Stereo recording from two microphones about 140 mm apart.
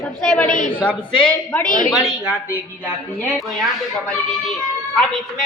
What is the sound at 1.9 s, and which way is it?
Speech, centre (ahead or behind).